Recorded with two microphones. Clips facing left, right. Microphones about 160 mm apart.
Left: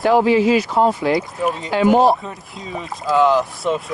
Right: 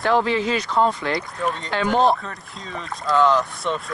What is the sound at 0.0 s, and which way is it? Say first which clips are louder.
Speech: left 6 dB; 15° left (ahead or behind).